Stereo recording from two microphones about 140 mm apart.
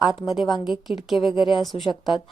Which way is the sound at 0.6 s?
Centre (ahead or behind).